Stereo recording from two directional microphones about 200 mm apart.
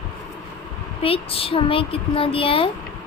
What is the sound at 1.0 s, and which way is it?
Speech, 25° left (ahead or behind).